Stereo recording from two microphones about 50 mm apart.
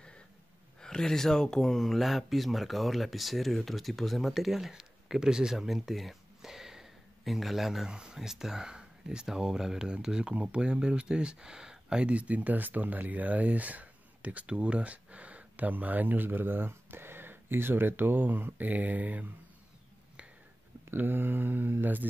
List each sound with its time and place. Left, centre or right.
0.7 s speech: centre; by 19.3 s right
20.9 s mantra: right